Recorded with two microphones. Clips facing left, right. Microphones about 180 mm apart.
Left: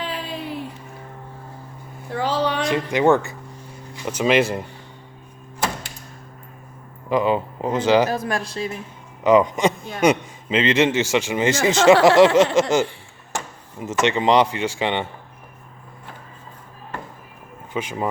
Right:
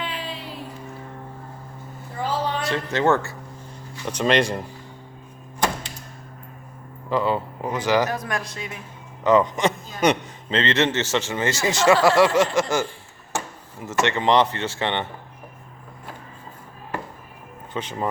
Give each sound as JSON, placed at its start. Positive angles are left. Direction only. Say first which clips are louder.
{"t": 0.0, "sound": "music", "louder": "left 2 dB", "side_deg": 40}
{"t": 2.1, "sound": "a sound", "louder": "left 4 dB", "side_deg": 80}
{"t": 2.6, "sound": "a man's voice", "louder": "left 3 dB", "side_deg": 15}
{"t": 7.1, "sound": "speech", "louder": "left 3 dB", "side_deg": 15}
{"t": 9.2, "sound": "a man's voice", "louder": "left 2 dB", "side_deg": 15}
{"t": 17.7, "sound": "a man's voice", "louder": "left 2 dB", "side_deg": 10}